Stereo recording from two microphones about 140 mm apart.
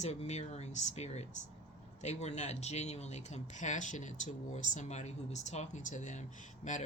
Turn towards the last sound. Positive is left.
turn(degrees=60)  # may be behind; listen again after turning